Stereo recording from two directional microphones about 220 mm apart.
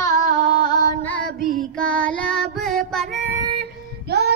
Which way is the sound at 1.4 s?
40° right (ahead or behind).